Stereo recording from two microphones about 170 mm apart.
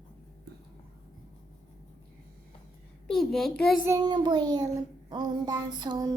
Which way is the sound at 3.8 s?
20° right (ahead or behind).